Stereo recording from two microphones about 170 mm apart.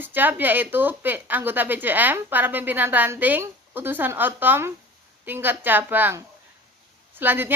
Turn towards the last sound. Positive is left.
turn(degrees=-10)  # may be behind; listen again after turning